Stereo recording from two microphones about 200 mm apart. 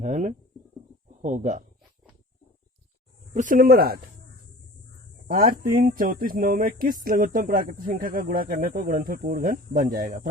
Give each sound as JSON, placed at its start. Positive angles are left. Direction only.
{"t": 0.0, "sound": "speech", "side_deg": -35}
{"t": 3.3, "sound": "speech", "side_deg": -40}
{"t": 5.3, "sound": "speech", "side_deg": -45}